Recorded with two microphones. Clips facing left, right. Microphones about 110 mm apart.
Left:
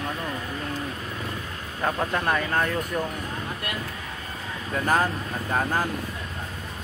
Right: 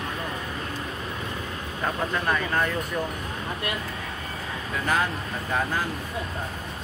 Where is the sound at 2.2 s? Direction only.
45° left (ahead or behind).